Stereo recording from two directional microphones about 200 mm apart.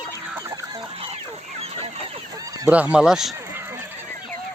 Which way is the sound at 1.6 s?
30° right (ahead or behind).